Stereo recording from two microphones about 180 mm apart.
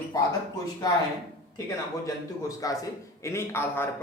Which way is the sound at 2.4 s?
20° left (ahead or behind).